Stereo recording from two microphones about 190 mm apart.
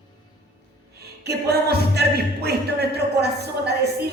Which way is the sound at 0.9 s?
60° right (ahead or behind).